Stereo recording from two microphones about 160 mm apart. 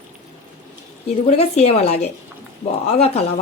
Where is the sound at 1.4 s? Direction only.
40° left (ahead or behind).